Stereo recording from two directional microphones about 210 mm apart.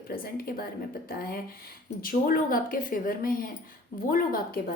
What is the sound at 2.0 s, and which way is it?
A woman's voice, 45° left (ahead or behind).